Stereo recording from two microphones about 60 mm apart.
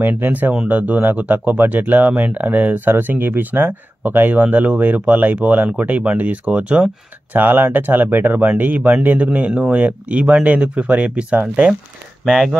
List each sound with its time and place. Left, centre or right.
0.0 s speech: right
12.3 s speech: centre